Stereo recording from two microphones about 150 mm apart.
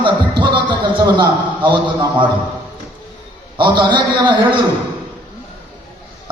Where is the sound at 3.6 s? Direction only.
30° right (ahead or behind).